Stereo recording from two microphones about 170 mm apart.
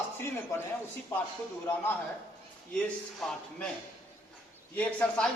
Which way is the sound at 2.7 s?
5° left (ahead or behind).